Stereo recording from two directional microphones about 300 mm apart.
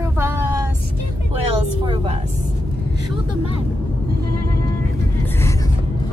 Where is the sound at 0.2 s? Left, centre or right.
Centre.